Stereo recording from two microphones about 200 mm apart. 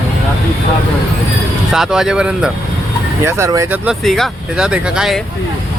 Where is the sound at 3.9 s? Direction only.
Centre (ahead or behind).